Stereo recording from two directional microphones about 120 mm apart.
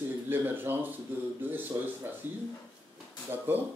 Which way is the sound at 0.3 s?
15° right (ahead or behind).